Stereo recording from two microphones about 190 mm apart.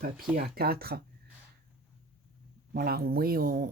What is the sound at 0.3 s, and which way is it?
Speech, 55° right (ahead or behind).